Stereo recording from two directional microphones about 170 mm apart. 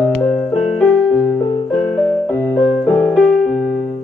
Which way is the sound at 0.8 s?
5° left (ahead or behind).